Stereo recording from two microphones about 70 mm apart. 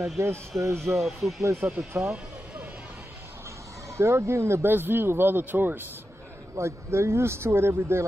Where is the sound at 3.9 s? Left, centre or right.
Right.